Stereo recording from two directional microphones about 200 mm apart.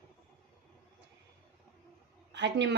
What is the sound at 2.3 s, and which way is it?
Speech, 60° right (ahead or behind).